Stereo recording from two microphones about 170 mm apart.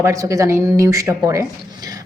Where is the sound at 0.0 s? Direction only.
20° right (ahead or behind).